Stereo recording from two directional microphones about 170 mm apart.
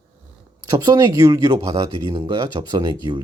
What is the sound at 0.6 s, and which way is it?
Speech, 20° right (ahead or behind).